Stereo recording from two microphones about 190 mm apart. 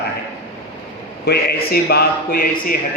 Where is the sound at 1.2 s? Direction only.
55° left (ahead or behind).